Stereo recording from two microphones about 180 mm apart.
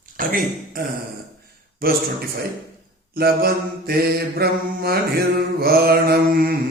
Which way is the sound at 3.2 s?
60° right (ahead or behind).